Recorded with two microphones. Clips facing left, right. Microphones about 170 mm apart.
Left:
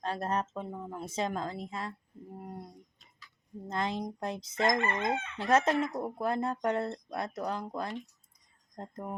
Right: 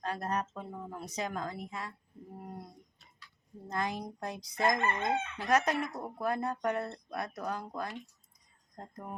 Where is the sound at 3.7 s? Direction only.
25° left (ahead or behind).